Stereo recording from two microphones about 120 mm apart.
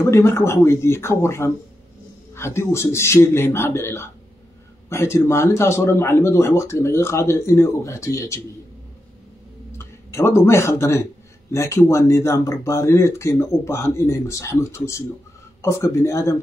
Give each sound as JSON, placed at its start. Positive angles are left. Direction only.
{"t": 0.0, "sound": "speech", "side_deg": 20}
{"t": 9.7, "sound": "speech", "side_deg": 20}